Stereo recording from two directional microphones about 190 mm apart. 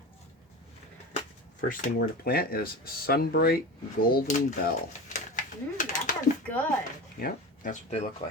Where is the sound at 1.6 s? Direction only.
45° left (ahead or behind).